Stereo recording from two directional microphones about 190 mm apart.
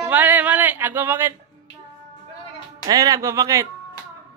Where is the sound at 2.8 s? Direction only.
15° right (ahead or behind).